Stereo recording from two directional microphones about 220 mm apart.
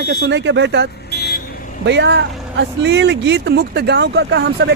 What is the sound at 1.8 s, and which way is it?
Speech, 55° right (ahead or behind).